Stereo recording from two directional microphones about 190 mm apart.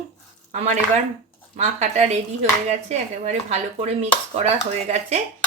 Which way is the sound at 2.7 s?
35° right (ahead or behind).